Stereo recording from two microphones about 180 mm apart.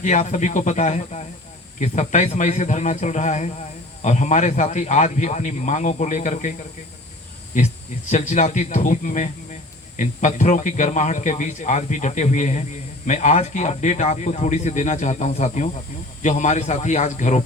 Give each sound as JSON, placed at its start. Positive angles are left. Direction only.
{"t": 0.0, "sound": "speech", "side_deg": 40}
{"t": 8.1, "sound": "speech", "side_deg": 40}